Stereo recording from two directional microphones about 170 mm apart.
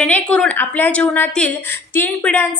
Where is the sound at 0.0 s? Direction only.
5° left (ahead or behind).